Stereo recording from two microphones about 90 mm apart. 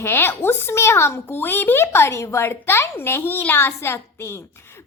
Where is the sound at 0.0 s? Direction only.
25° left (ahead or behind).